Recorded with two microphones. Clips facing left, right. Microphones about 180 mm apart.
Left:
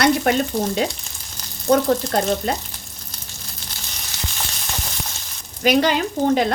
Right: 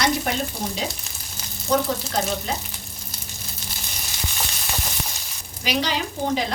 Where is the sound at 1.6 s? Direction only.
60° left (ahead or behind).